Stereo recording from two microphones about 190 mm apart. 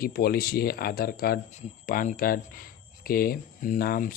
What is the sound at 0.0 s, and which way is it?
Speech, 50° left (ahead or behind).